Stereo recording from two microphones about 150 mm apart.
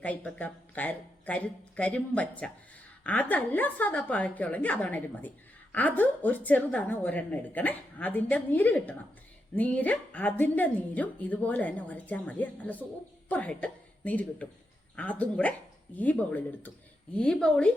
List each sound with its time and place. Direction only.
0.0 s a woman's voice: 10° left (ahead or behind)